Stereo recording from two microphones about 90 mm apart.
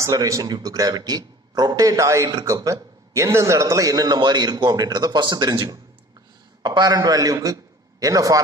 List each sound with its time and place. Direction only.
0.0 s a man's voice: 40° right (ahead or behind)